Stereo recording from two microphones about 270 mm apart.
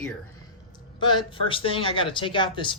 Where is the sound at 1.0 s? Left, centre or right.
Centre.